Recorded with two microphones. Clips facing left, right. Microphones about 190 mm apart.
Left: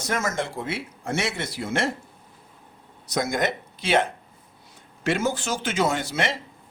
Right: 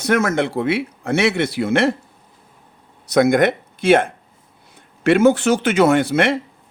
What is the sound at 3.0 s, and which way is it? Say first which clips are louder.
Speech: right 11 dB; 60° right (ahead or behind).